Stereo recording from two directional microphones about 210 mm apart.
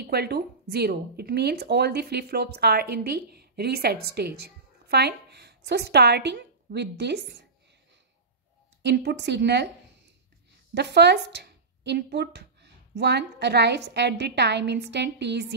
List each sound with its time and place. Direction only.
0.0 s speech: 50° right (ahead or behind)
8.8 s a woman's voice: 55° right (ahead or behind)
10.7 s speech: 55° right (ahead or behind)